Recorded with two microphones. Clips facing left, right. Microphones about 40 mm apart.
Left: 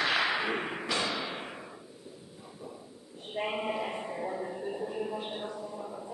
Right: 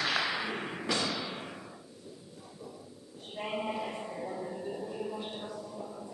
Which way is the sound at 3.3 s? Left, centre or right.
Left.